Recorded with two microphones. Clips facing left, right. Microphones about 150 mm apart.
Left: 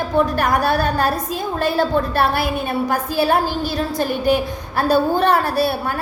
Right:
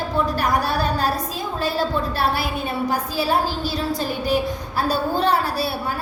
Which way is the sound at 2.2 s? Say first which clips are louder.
Left 4 dB; 55° left (ahead or behind).